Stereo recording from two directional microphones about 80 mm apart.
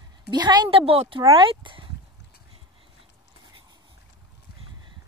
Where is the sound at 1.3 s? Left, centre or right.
Right.